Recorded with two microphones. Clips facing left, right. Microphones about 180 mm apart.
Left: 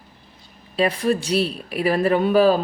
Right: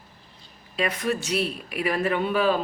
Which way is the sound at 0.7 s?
30° left (ahead or behind).